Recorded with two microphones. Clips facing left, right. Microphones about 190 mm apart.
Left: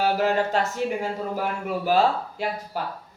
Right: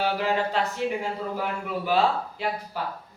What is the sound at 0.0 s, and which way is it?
Speech, 45° left (ahead or behind).